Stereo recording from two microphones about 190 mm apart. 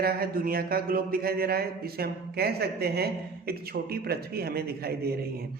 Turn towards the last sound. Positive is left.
turn(degrees=-55)  # may be behind; listen again after turning